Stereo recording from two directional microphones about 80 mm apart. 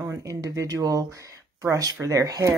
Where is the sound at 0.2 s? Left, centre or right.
Right.